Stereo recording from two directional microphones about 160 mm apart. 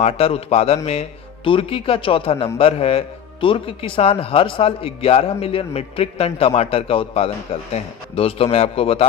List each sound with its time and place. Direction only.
0.0 s a man's voice: 40° left (ahead or behind)